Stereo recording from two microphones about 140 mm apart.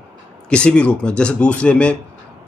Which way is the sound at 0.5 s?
10° left (ahead or behind).